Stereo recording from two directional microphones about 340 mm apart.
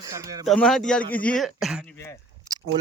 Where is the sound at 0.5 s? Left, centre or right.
Centre.